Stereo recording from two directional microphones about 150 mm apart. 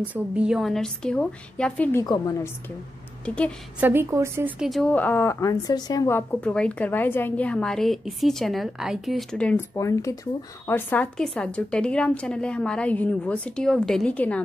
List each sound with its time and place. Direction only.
0.0 s a woman's voice: 10° right (ahead or behind); by 2.0 s 10° left (ahead or behind)
2.0 s a woman's voice: 20° left (ahead or behind)
3.3 s a woman's voice: 10° left (ahead or behind)
3.8 s a woman's voice: 15° right (ahead or behind)
4.6 s a woman's voice: centre (ahead or behind)
4.9 s a woman's voice: 15° left (ahead or behind)
9.8 s a woman's voice: 20° left (ahead or behind)